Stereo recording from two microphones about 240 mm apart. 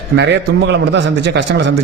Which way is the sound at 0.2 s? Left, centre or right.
Right.